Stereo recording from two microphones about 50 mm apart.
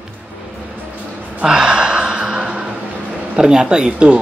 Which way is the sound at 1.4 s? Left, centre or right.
Centre.